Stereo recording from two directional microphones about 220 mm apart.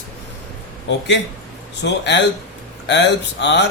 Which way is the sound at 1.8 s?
50° left (ahead or behind).